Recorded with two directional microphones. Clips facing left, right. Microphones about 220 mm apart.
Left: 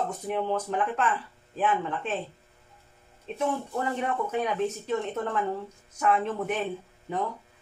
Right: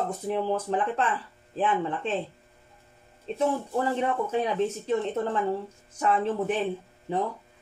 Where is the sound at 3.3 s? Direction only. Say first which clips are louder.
Right 3 dB; 30° right (ahead or behind).